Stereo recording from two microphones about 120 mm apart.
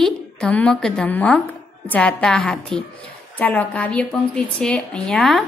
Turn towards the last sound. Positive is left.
turn(degrees=5)  # may be behind; listen again after turning